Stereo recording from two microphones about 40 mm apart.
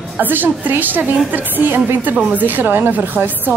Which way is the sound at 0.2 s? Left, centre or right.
Right.